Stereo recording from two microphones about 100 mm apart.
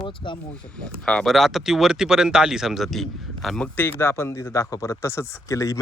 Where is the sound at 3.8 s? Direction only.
25° left (ahead or behind).